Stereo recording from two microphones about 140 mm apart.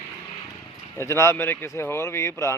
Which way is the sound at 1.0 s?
20° left (ahead or behind).